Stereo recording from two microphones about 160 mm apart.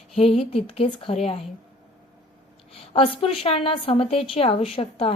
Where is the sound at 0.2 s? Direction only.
35° left (ahead or behind).